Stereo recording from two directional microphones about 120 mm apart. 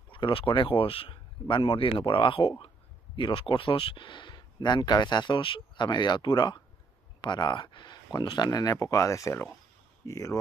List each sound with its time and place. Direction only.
0.1 s speech: 45° left (ahead or behind); by 10.3 s 25° left (ahead or behind)